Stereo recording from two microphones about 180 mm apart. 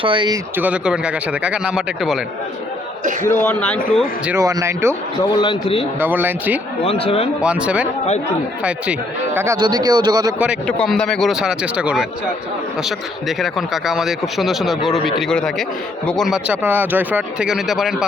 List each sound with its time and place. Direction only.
0.0 s speech: 25° right (ahead or behind)
0.5 s speech: 10° right (ahead or behind)
3.0 s a man's voice: 45° right (ahead or behind)
3.2 s speech: 10° left (ahead or behind)
4.3 s speech: 15° right (ahead or behind)
5.3 s a man's voice: 25° left (ahead or behind)
6.0 s speech: 10° right (ahead or behind)
6.8 s speech: 30° left (ahead or behind)
7.4 s speech: 5° right (ahead or behind)
10.3 s speech: 5° right (ahead or behind)
10.7 s a man's voice: 5° left (ahead or behind)
13.2 s a man's voice: centre (ahead or behind)